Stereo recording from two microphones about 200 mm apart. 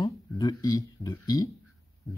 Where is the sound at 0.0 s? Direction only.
20° left (ahead or behind).